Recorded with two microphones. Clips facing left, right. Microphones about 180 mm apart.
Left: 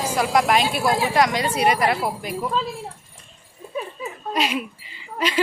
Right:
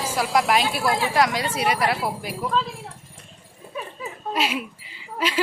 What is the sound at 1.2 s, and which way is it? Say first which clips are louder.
Speech: left 2 dB; 5° right (ahead or behind).